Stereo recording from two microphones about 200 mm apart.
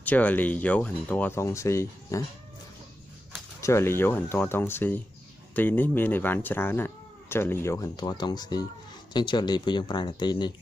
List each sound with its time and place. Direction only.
0.0 s speech: 10° left (ahead or behind)
3.6 s speech: 10° left (ahead or behind)